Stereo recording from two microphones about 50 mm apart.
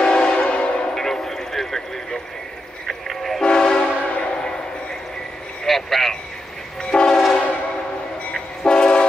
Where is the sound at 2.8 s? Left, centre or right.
Centre.